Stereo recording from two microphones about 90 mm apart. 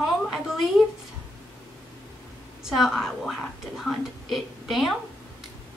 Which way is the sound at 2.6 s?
5° right (ahead or behind).